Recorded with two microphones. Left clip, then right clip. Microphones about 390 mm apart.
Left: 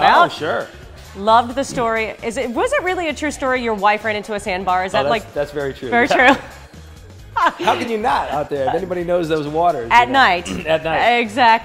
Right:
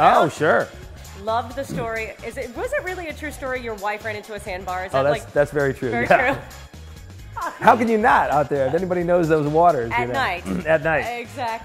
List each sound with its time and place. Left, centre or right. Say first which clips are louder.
0.0 s music: left 3 dB; left
0.4 s a man's voice: right 3 dB; right
1.2 s a woman's voice: left 10 dB; left
5.3 s a man's voice: right 3 dB; right
5.9 s speech: left 6 dB; left
7.6 s a man's voice: right 2 dB; right
9.8 s speech: left 10 dB; left
10.5 s speech: left 1 dB; right
11.1 s speech: left 14 dB; left